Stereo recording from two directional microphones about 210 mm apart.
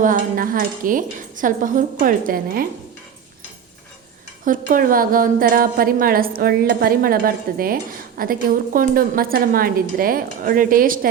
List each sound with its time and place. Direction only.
0.0 s a woman's voice: 40° right (ahead or behind)
4.4 s a woman's voice: 40° right (ahead or behind)